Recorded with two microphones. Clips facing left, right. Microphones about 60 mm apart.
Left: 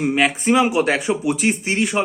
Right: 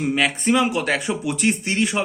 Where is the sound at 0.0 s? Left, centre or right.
Centre.